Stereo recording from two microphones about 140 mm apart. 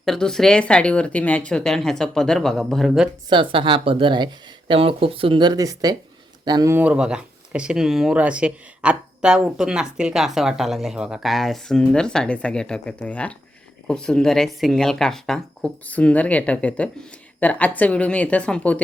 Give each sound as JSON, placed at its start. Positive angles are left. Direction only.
{"t": 0.0, "sound": "speech", "side_deg": 5}
{"t": 3.2, "sound": "speech", "side_deg": -35}
{"t": 6.7, "sound": "speech", "side_deg": -10}